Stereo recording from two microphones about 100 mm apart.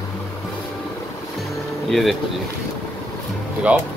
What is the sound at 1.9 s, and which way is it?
Speech, centre (ahead or behind).